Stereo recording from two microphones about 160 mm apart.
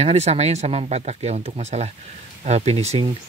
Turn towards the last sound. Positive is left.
turn(degrees=-40)  # may be behind; listen again after turning